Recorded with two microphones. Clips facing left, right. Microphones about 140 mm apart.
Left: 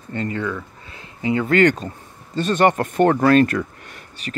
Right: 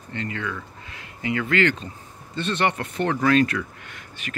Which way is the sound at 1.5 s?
45° left (ahead or behind).